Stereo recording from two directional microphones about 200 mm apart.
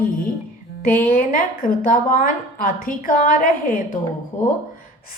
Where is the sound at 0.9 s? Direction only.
50° left (ahead or behind).